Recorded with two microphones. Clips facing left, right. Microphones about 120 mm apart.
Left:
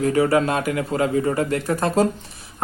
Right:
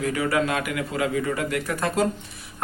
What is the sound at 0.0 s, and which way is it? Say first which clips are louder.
A man's voice: left 6 dB; 35° left (ahead or behind).